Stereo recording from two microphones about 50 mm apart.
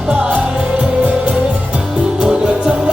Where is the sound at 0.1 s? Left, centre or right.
Right.